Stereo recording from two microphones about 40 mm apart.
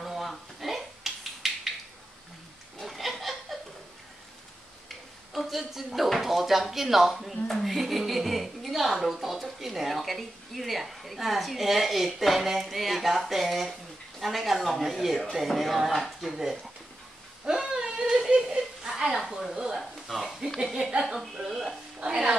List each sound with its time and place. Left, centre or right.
0.0 s a sound: centre
2.8 s chuckle: centre
4.8 s speech: centre
17.5 s a sound: centre
19.8 s speech: centre
22.0 s speech: right